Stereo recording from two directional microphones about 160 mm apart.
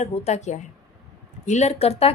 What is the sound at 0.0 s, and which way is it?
A woman's voice, 45° left (ahead or behind).